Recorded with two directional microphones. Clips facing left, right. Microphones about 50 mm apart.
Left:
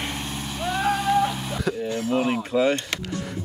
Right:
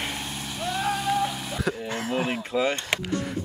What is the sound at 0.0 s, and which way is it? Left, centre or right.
Vehicle, centre.